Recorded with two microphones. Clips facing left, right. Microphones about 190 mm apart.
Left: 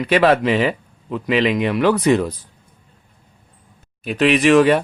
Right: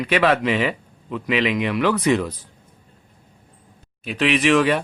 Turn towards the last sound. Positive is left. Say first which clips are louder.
# left 5 dB
turn(degrees=45)  # may be behind; listen again after turning